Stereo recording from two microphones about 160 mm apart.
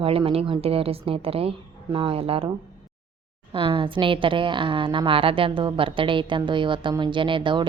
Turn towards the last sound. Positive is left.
turn(degrees=-30)  # may be behind; listen again after turning